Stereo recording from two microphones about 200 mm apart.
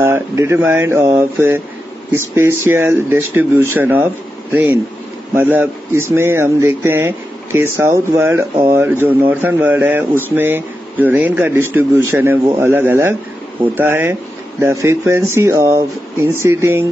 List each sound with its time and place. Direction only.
0.0 s speech: 10° right (ahead or behind)